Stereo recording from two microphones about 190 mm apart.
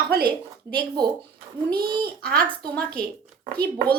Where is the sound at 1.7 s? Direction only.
55° right (ahead or behind).